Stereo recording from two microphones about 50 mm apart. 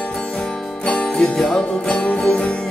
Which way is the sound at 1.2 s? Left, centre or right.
Centre.